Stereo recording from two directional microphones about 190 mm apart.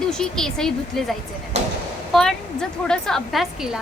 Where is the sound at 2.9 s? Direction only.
5° left (ahead or behind).